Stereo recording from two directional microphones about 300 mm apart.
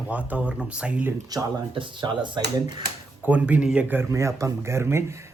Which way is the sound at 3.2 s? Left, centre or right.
Centre.